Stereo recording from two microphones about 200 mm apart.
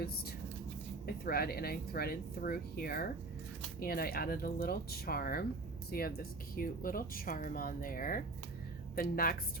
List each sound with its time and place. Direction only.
1.0 s speech: 50° left (ahead or behind)